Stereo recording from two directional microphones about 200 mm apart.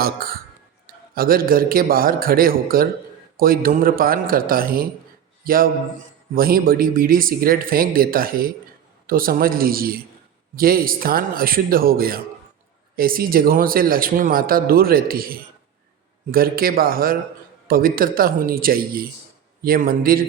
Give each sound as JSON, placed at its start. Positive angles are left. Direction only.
{"t": 0.0, "sound": "a man's voice", "side_deg": -50}
{"t": 6.3, "sound": "a man's voice", "side_deg": -45}